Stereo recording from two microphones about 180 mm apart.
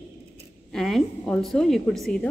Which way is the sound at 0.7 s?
Centre (ahead or behind).